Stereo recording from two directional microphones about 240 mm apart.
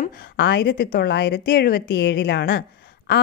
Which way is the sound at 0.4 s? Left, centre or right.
Left.